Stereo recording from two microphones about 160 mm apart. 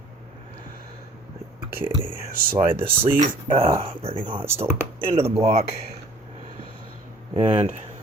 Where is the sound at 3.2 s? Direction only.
35° right (ahead or behind).